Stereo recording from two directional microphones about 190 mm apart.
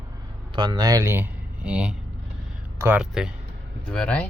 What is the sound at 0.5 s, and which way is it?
Speech, 25° right (ahead or behind).